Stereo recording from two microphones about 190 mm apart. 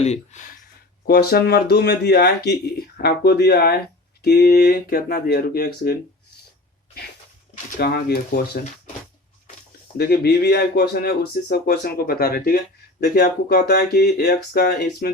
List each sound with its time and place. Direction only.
0.0 s speech: 35° left (ahead or behind)
1.0 s speech: 55° left (ahead or behind)
7.5 s speech: 55° left (ahead or behind)
10.0 s speech: 55° left (ahead or behind)